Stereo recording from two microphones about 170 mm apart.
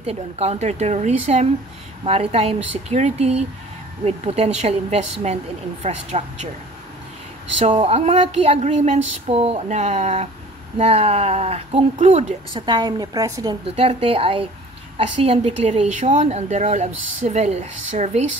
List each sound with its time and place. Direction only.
0.0 s a woman's voice: 35° right (ahead or behind)
7.5 s a woman's voice: 40° right (ahead or behind)
12.5 s a woman's voice: 25° right (ahead or behind)
13.7 s a woman's voice: 35° right (ahead or behind)